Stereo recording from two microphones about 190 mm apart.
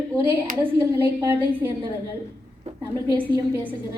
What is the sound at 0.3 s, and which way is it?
A woman's voice, 10° right (ahead or behind).